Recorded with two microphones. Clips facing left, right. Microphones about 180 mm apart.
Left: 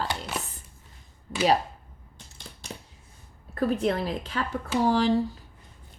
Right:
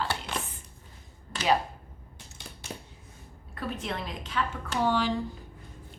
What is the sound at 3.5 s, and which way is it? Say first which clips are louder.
Speech: left 9 dB; 40° left (ahead or behind).